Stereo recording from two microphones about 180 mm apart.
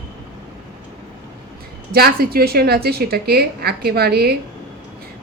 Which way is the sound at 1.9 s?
55° right (ahead or behind).